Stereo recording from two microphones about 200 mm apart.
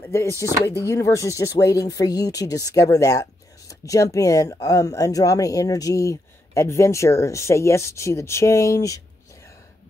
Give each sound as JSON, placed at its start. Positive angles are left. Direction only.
{"t": 0.0, "sound": "speech", "side_deg": 15}